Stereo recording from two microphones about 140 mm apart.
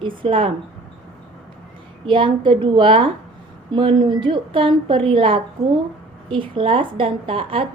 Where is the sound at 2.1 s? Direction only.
35° right (ahead or behind).